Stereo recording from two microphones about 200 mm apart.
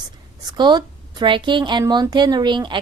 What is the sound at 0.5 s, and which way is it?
A woman's voice, 20° right (ahead or behind).